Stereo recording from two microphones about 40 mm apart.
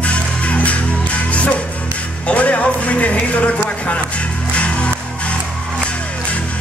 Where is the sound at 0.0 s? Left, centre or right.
Left.